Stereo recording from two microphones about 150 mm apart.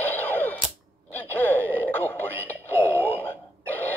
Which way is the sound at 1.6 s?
15° right (ahead or behind).